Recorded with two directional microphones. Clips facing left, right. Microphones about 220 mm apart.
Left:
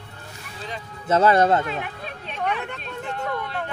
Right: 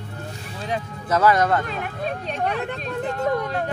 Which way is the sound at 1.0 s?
25° left (ahead or behind).